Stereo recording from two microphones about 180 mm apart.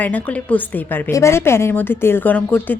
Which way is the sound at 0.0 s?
10° left (ahead or behind).